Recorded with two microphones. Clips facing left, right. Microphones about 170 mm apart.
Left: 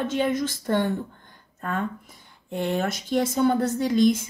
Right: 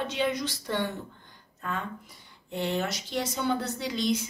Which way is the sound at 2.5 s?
50° left (ahead or behind).